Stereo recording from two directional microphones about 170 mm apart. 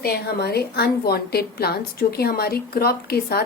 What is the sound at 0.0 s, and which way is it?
A woman's voice, 65° left (ahead or behind).